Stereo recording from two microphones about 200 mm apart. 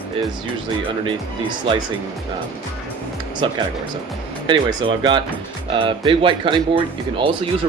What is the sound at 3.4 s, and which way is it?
Speech, 25° right (ahead or behind).